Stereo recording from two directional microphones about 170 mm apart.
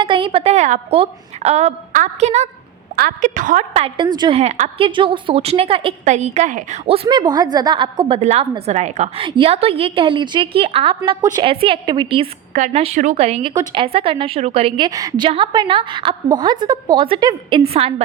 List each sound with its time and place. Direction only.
0.0 s a woman's voice: 30° right (ahead or behind)
2.9 s a woman's voice: 55° right (ahead or behind)
3.8 s a woman's voice: 30° right (ahead or behind)
4.4 s a woman's voice: 40° right (ahead or behind)
4.9 s a woman's voice: 30° right (ahead or behind)
12.5 s a woman's voice: 40° right (ahead or behind)
13.5 s a woman's voice: 25° right (ahead or behind)